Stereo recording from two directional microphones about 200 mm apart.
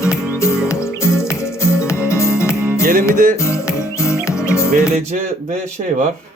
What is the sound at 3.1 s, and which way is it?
Speech, 40° right (ahead or behind).